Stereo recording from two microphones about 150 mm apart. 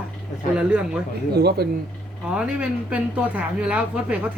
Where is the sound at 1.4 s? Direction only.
90° right.